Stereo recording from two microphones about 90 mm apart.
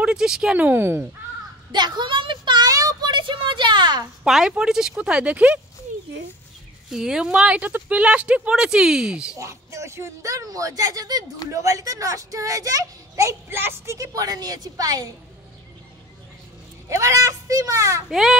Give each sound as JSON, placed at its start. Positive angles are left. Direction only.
{"t": 0.0, "sound": "speech", "side_deg": -10}
{"t": 0.7, "sound": "speech", "side_deg": -25}
{"t": 1.7, "sound": "a woman's voice", "side_deg": -55}
{"t": 2.7, "sound": "a child's voice", "side_deg": -40}
{"t": 4.2, "sound": "speech", "side_deg": -5}
{"t": 6.9, "sound": "speech", "side_deg": -5}
{"t": 9.4, "sound": "a child's voice", "side_deg": -35}
{"t": 13.9, "sound": "a woman's voice", "side_deg": -40}
{"t": 16.9, "sound": "a child's voice", "side_deg": -35}
{"t": 18.0, "sound": "speech", "side_deg": -5}